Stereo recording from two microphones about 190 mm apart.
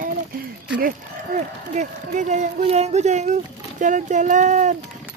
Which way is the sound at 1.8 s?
40° right (ahead or behind).